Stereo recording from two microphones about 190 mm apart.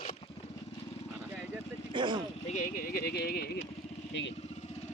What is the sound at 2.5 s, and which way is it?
Speech, 45° left (ahead or behind).